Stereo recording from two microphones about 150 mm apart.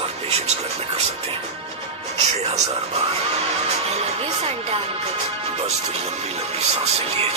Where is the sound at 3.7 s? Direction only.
45° right (ahead or behind).